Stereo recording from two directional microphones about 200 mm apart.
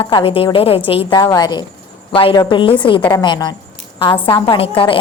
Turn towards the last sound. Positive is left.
turn(degrees=25)  # may be behind; listen again after turning